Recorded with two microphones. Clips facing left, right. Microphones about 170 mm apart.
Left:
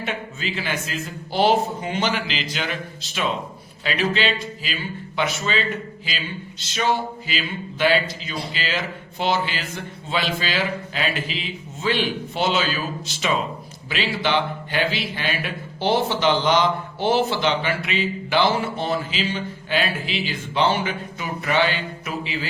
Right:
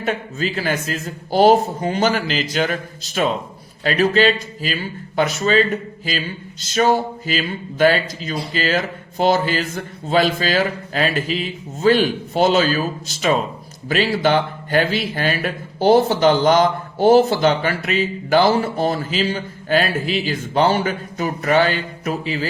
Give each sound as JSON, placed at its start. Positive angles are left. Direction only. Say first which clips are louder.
{"t": 0.0, "sound": "a man's voice", "louder": "right 6 dB", "side_deg": -40}